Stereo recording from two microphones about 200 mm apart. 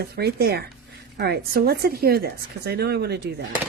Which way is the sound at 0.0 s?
50° right (ahead or behind).